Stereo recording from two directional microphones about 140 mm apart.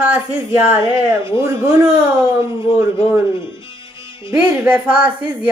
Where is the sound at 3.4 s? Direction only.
40° left (ahead or behind).